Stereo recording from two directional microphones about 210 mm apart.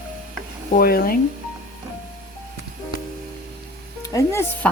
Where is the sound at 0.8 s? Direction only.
45° left (ahead or behind).